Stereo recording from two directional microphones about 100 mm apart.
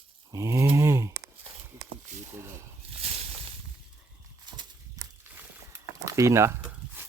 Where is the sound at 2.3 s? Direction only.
30° right (ahead or behind).